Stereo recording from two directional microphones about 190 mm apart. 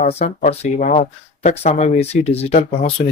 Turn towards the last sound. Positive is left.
turn(degrees=35)  # may be behind; listen again after turning